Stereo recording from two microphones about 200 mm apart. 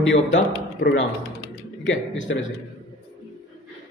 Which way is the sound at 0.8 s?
60° left (ahead or behind).